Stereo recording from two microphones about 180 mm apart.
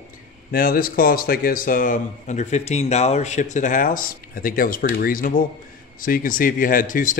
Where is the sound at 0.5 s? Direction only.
55° left (ahead or behind).